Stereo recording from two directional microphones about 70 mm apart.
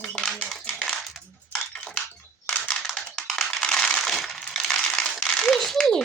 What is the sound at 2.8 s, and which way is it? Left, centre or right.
Coin, centre.